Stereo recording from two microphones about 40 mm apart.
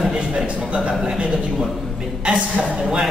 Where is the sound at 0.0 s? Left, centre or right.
Centre.